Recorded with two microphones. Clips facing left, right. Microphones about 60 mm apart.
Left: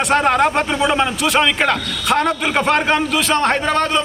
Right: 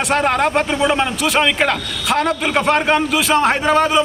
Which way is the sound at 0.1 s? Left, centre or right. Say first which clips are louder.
Left 1 dB; centre.